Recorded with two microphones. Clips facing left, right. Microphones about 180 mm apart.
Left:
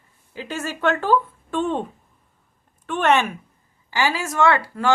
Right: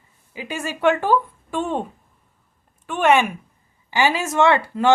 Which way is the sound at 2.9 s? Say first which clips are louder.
Right 2 dB; 10° right (ahead or behind).